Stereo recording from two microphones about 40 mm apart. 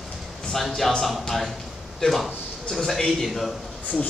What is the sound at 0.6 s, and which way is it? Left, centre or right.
Speech, centre.